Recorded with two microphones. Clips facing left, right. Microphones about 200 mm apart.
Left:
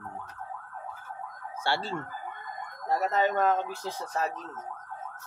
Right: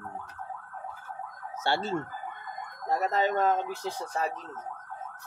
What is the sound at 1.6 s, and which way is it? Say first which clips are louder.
Ambulance: right 2 dB; 20° right (ahead or behind).